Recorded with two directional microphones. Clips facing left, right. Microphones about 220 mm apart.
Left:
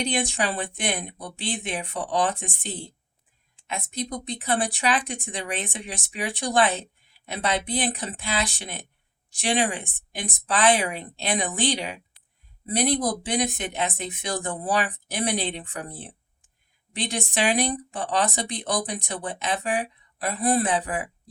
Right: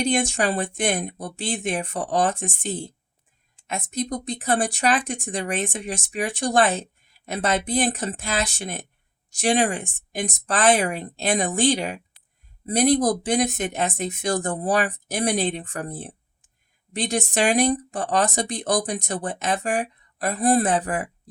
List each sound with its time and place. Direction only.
0.0 s speech: 45° right (ahead or behind)